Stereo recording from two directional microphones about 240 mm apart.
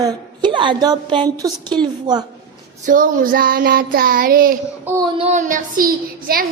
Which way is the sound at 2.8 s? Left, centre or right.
Right.